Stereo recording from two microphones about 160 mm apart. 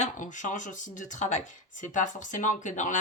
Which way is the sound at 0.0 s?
50° left (ahead or behind).